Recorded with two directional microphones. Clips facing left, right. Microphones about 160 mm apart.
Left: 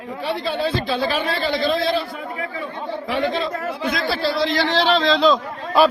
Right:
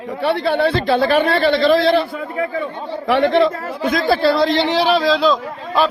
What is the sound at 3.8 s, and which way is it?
Speech, 50° right (ahead or behind).